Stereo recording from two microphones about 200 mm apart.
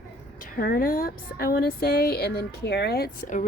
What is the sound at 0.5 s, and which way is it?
A woman's voice, 45° left (ahead or behind).